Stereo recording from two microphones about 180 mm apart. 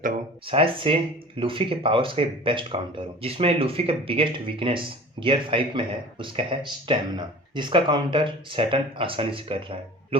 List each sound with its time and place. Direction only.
0.4 s speech: 30° right (ahead or behind)